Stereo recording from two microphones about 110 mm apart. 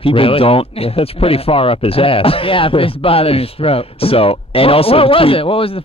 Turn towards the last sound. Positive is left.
turn(degrees=55)  # may be behind; listen again after turning